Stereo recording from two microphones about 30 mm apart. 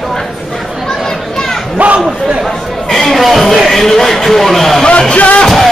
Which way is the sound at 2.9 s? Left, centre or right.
Centre.